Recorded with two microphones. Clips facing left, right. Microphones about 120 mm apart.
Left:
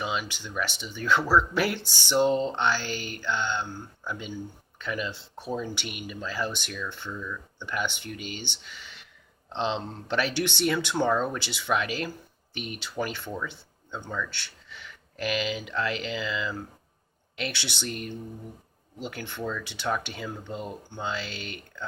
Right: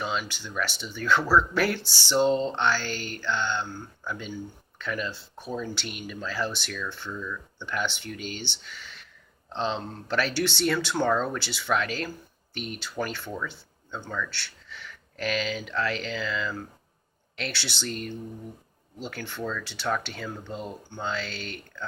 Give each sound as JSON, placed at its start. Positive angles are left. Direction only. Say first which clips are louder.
{"t": 0.0, "sound": "speech", "louder": "even", "side_deg": 15}